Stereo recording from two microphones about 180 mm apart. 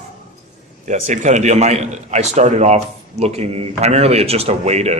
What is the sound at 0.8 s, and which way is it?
A man's voice, 40° right (ahead or behind).